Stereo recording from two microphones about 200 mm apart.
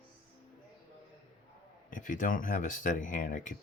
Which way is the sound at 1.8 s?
40° left (ahead or behind).